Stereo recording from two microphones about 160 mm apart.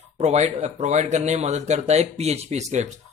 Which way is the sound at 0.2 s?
45° right (ahead or behind).